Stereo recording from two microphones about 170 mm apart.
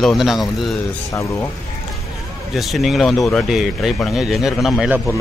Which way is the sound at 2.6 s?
Centre (ahead or behind).